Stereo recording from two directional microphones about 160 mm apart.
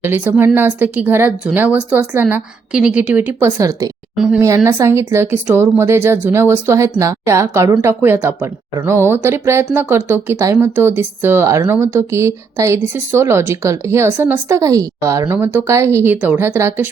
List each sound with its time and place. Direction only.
0.0 s speech: 15° right (ahead or behind)